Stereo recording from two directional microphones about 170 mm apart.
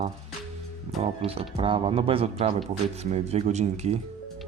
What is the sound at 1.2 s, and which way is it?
Speech, 35° right (ahead or behind).